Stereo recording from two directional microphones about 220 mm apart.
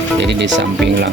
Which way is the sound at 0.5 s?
50° right (ahead or behind).